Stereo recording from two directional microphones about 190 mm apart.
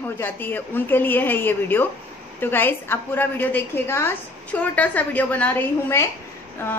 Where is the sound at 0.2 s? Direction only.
10° left (ahead or behind).